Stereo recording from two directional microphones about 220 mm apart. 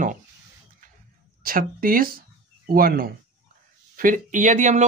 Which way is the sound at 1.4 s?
40° right (ahead or behind).